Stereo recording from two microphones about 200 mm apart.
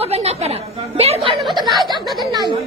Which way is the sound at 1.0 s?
30° right (ahead or behind).